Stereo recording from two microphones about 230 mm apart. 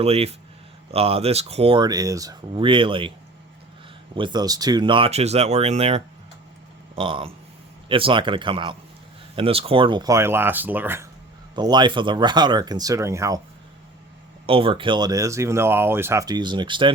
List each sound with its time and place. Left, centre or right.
0.0 s speech: right
4.1 s speech: centre
14.4 s speech: right